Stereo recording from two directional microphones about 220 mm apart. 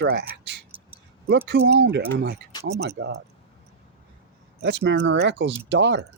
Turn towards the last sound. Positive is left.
turn(degrees=-55)  # may be behind; listen again after turning